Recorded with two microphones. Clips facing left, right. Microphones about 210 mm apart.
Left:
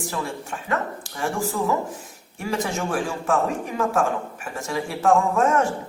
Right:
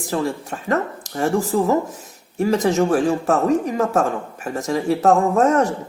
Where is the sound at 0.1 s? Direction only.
40° right (ahead or behind).